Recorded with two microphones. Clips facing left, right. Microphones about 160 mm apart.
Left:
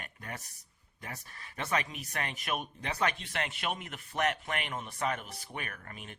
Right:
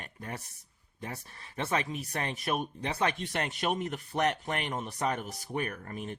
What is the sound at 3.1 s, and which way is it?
Speech, 40° right (ahead or behind).